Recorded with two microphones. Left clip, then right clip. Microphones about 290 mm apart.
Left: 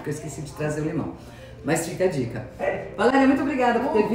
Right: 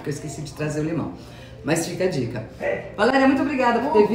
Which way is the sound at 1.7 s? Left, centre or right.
Centre.